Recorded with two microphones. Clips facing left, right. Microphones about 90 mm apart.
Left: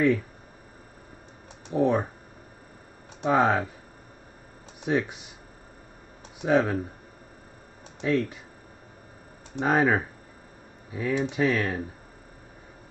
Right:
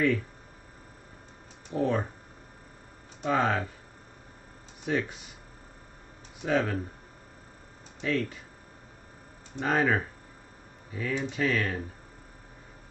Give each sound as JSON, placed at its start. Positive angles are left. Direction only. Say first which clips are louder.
{"t": 1.7, "sound": "speech", "louder": "left 4 dB", "side_deg": 20}
{"t": 3.2, "sound": "speech", "louder": "left 4 dB", "side_deg": 20}
{"t": 4.8, "sound": "speech", "louder": "left 4 dB", "side_deg": 15}
{"t": 6.4, "sound": "speech", "louder": "left 5 dB", "side_deg": 20}
{"t": 8.0, "sound": "speech", "louder": "left 4 dB", "side_deg": 15}
{"t": 9.6, "sound": "speech", "louder": "left 3 dB", "side_deg": 15}